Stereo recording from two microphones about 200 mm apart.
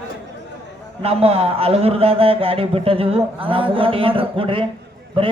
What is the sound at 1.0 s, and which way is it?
A man's voice, 30° right (ahead or behind).